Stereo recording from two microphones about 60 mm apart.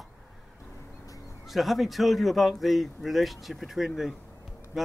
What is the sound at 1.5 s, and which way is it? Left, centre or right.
A man's voice, centre.